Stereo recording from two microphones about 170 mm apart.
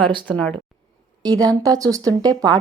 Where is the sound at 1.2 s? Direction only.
20° right (ahead or behind).